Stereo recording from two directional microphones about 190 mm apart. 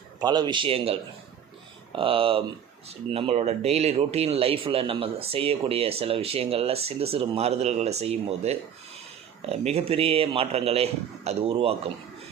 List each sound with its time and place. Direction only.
0.2 s speech: 20° right (ahead or behind)